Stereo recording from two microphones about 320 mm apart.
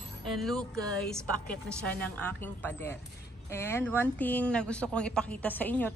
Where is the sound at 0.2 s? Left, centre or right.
Centre.